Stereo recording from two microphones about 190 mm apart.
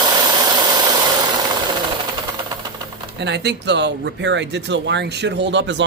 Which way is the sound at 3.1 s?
65° right (ahead or behind).